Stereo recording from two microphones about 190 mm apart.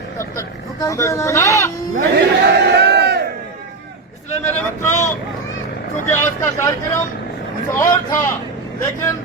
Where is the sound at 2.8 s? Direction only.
60° right (ahead or behind).